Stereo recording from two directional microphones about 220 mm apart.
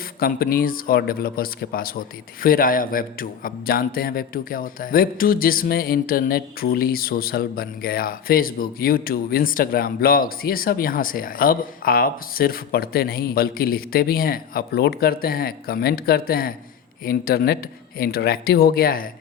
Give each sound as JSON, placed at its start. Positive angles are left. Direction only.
{"t": 0.2, "sound": "speech", "side_deg": 40}